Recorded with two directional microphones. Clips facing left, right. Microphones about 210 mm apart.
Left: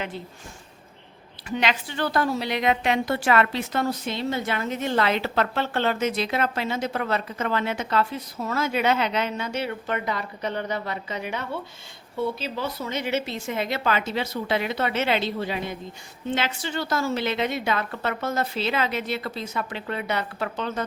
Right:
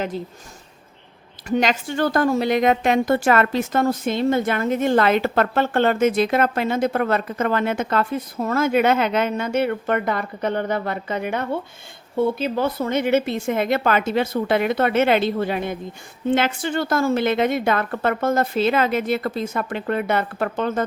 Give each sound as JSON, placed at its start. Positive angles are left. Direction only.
{"t": 1.5, "sound": "a woman's voice", "side_deg": -45}